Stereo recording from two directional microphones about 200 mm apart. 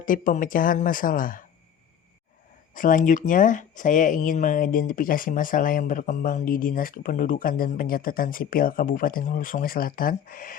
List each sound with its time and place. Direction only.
0.0 s speech: 40° left (ahead or behind)
2.7 s speech: 45° left (ahead or behind)